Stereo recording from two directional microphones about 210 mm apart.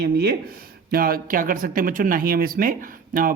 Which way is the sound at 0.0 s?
50° right (ahead or behind).